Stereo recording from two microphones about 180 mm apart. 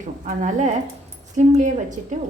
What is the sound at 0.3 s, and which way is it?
A woman's voice, 45° right (ahead or behind).